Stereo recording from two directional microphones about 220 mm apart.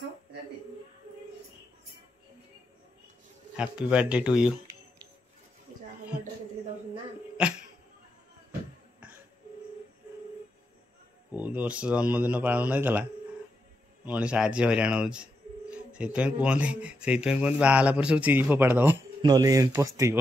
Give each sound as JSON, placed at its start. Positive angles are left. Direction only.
{"t": 3.5, "sound": "speech", "side_deg": -5}
{"t": 11.3, "sound": "speech", "side_deg": -5}
{"t": 14.0, "sound": "speech", "side_deg": -5}